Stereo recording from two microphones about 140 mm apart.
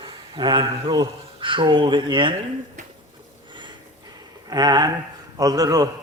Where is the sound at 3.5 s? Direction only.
35° right (ahead or behind).